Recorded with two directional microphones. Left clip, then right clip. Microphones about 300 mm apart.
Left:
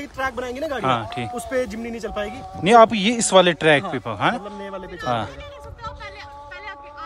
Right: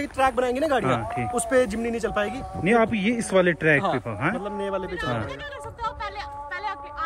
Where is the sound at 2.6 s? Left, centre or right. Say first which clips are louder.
Left 8 dB; centre.